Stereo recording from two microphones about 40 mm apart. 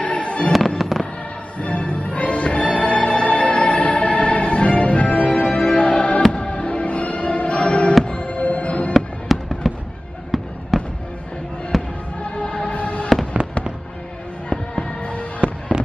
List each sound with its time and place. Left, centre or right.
0.0 s fireworks: left
0.5 s fireworks: centre
1.6 s music: left
8.9 s fireworks: centre
12.4 s music: left
14.5 s music: left
15.7 s fireworks: right